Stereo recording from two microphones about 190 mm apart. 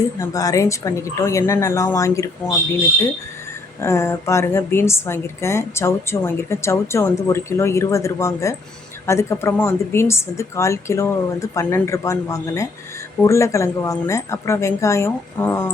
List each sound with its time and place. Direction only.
0.2 s a woman's voice: 15° left (ahead or behind)
3.8 s a woman's voice: 15° left (ahead or behind)